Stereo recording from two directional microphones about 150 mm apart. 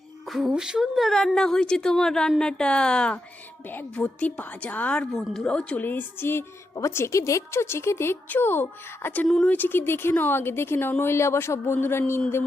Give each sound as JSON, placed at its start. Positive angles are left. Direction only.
{"t": 0.3, "sound": "a woman's voice", "side_deg": 0}
{"t": 9.2, "sound": "a woman's voice", "side_deg": 5}